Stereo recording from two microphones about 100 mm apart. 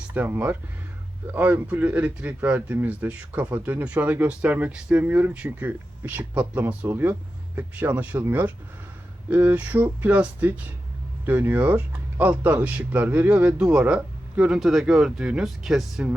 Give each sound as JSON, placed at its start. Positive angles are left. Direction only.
{"t": 0.1, "sound": "speech", "side_deg": -20}